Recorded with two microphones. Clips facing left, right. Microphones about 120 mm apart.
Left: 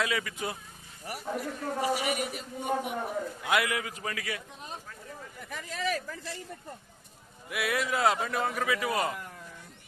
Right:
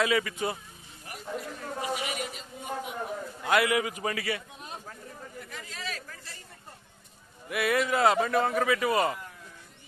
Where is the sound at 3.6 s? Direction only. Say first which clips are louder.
Right 6 dB; 10° right (ahead or behind).